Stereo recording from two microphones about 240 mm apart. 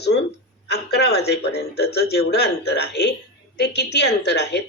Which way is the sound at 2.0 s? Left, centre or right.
Left.